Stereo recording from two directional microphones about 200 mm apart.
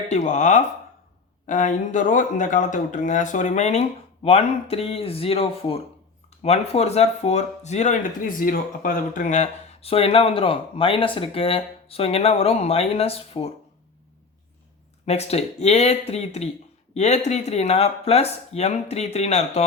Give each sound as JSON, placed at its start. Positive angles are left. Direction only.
{"t": 0.1, "sound": "speech", "side_deg": 35}
{"t": 15.0, "sound": "speech", "side_deg": 30}